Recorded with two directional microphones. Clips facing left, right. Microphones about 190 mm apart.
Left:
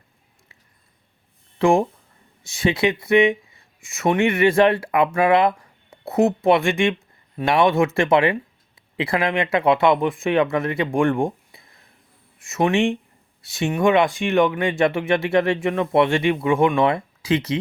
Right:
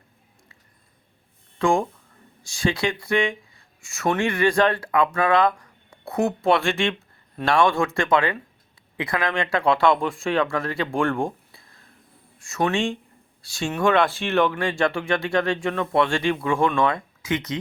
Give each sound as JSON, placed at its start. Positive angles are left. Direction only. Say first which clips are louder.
{"t": 1.5, "sound": "speech", "louder": "left 4 dB", "side_deg": 25}